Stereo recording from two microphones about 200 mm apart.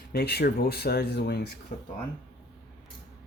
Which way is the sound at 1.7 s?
40° left (ahead or behind).